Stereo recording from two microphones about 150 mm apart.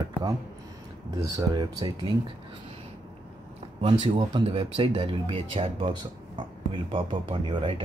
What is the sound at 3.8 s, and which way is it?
Speech, 35° right (ahead or behind).